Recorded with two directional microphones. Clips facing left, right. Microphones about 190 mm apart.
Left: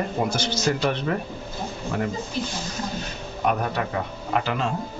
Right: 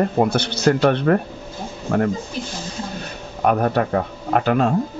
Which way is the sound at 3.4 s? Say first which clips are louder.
Right 7 dB; 50° right (ahead or behind).